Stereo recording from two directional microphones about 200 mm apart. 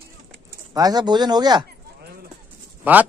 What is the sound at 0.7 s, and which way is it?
Speech, 20° right (ahead or behind).